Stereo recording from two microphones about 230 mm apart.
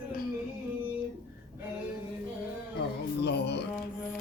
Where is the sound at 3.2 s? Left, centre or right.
Left.